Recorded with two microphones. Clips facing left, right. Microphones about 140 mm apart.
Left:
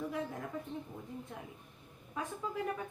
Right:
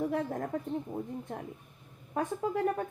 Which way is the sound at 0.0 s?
50° right (ahead or behind).